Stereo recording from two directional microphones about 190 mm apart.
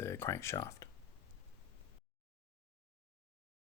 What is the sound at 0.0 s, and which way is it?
Speech, 15° left (ahead or behind).